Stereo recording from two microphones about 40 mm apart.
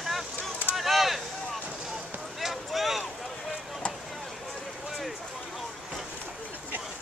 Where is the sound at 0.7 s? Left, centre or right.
Centre.